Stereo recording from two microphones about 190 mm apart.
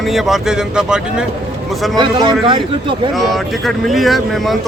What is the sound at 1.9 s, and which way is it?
Speech, 20° right (ahead or behind).